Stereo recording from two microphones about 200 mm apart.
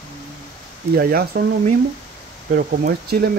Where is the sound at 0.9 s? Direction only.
45° right (ahead or behind).